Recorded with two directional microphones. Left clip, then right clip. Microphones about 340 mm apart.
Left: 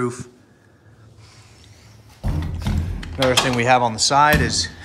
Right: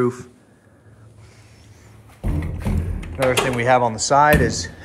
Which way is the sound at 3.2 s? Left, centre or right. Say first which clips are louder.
Left 1 dB; centre.